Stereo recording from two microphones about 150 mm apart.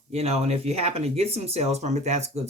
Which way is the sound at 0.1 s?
45° right (ahead or behind).